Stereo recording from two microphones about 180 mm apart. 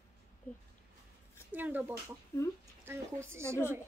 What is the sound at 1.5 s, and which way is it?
A child's voice, 10° right (ahead or behind).